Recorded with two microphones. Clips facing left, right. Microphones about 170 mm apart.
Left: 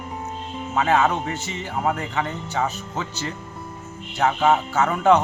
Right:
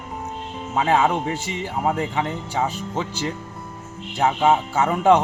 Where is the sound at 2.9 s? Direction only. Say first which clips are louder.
Right 3 dB; 25° right (ahead or behind).